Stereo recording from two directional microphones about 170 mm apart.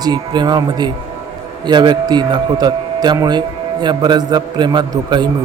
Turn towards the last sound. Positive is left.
turn(degrees=-25)  # may be behind; listen again after turning